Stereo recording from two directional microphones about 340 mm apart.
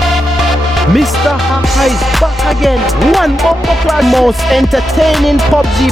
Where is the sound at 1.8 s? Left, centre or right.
Centre.